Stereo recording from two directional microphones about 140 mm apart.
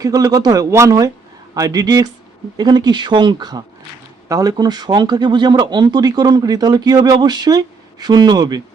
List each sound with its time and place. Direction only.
0.0 s speech: 25° right (ahead or behind)